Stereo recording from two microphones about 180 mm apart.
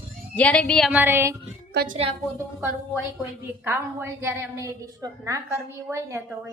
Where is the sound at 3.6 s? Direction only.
10° right (ahead or behind).